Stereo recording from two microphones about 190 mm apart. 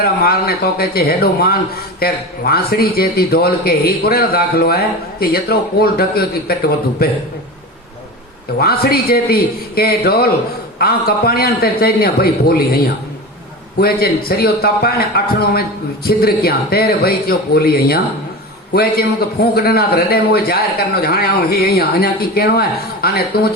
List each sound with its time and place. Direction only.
0.0 s a man's voice: 55° left (ahead or behind)
8.5 s a man's voice: 55° left (ahead or behind)